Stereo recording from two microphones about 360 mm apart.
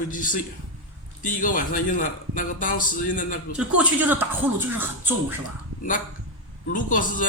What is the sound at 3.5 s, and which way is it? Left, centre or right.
Speech, centre.